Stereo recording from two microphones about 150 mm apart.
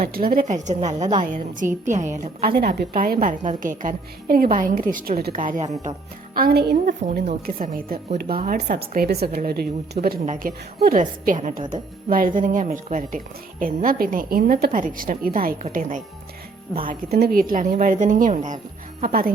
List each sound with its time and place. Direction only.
0.0 s speech: 75° right (ahead or behind); by 2.0 s 55° right (ahead or behind)
2.6 s a woman's voice: 90° right; by 5.6 s 60° right (ahead or behind)
6.3 s speech: 85° right
7.4 s a woman's voice: 70° right (ahead or behind); by 10.2 s 90° right
10.2 s a woman's voice: 75° right (ahead or behind)
17.2 s speech: 90° right
17.5 s speech: 65° right (ahead or behind)